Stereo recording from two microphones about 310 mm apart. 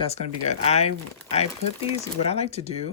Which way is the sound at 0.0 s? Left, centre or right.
Centre.